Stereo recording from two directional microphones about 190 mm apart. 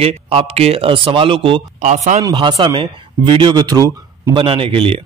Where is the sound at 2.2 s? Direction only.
25° right (ahead or behind).